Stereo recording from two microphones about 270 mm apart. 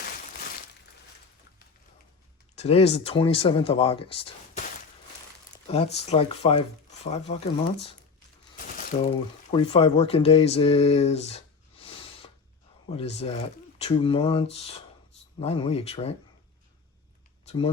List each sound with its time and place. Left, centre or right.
2.6 s speech: left
5.6 s speech: left
8.5 s speech: left
17.4 s a sound: left